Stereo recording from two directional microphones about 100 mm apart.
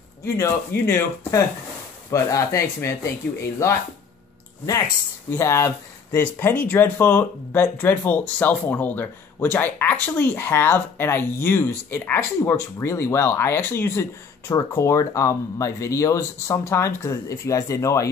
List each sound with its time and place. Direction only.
0.2 s speech: 25° left (ahead or behind)
5.3 s speech: 30° left (ahead or behind)
6.4 s speech: 15° left (ahead or behind); by 18.1 s 35° left (ahead or behind)